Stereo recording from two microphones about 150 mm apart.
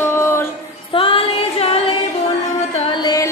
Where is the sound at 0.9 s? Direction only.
35° left (ahead or behind).